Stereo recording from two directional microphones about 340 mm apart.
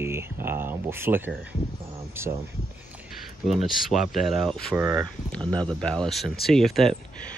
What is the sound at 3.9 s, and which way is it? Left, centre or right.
Speech, centre.